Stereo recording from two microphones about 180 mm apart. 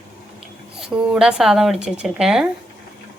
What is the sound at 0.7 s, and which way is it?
A woman's voice, 5° right (ahead or behind).